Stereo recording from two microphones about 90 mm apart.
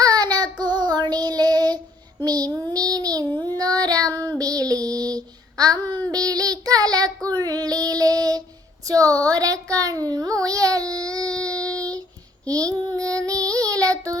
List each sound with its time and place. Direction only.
0.0 s child singing: 45° right (ahead or behind)
8.9 s a sound: 40° right (ahead or behind)
11.7 s child singing: 40° right (ahead or behind)